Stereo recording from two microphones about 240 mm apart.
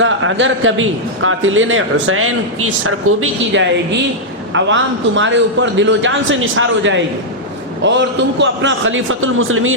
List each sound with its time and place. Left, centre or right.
0.0 s a man's voice: right